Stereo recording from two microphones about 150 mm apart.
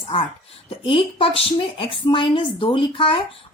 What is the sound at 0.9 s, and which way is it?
Speech, 35° left (ahead or behind).